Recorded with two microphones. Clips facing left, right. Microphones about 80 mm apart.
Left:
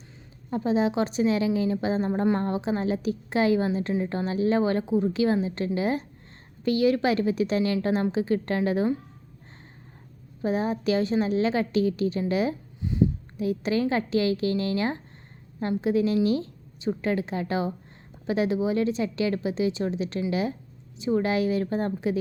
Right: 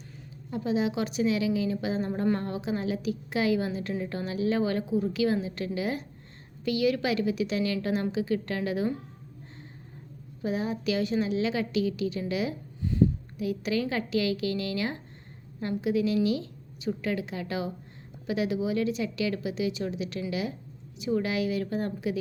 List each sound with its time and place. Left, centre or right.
0.5 s a woman's voice: left
10.4 s a woman's voice: left
12.8 s a sound: centre
13.4 s a woman's voice: left